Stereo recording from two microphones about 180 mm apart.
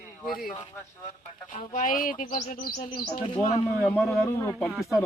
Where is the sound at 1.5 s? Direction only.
45° left (ahead or behind).